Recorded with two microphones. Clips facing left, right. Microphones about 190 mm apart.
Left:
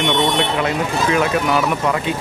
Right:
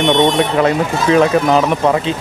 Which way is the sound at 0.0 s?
40° right (ahead or behind).